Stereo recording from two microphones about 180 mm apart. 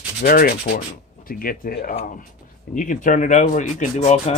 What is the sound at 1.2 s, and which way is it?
Speech, 55° left (ahead or behind).